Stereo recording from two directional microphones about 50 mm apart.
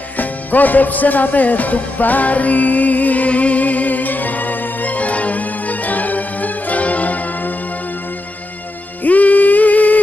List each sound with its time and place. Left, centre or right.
0.2 s music: left
9.0 s music: left